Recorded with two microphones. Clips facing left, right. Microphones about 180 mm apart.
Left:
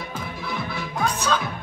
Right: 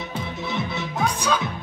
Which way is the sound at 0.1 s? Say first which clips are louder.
Right 4 dB; 25° right (ahead or behind).